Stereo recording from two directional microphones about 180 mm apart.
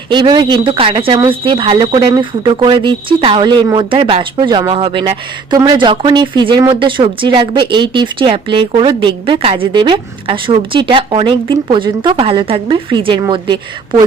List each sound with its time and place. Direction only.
0.1 s speech: 25° right (ahead or behind)